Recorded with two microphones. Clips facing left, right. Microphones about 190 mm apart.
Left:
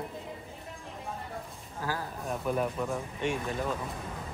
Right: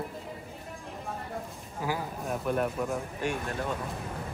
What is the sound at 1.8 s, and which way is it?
Speech, 15° right (ahead or behind).